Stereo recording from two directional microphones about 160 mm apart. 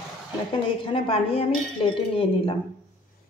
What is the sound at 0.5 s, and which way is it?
Speech, 35° left (ahead or behind).